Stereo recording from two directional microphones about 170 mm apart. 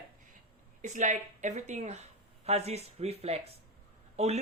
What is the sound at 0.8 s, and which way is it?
Speech, 45° right (ahead or behind).